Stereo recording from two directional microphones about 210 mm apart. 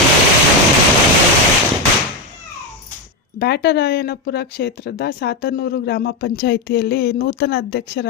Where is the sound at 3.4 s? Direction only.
50° left (ahead or behind).